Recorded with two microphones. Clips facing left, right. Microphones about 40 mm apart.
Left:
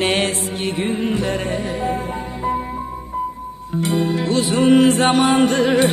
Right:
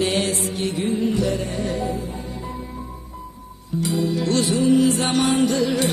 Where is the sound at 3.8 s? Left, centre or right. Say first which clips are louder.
Left 3 dB; left.